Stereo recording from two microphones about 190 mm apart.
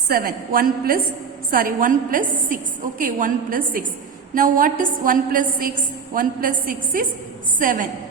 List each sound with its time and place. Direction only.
0.1 s a woman's voice: 50° right (ahead or behind)